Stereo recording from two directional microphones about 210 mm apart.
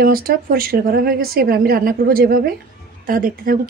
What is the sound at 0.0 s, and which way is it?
Speech, 45° right (ahead or behind).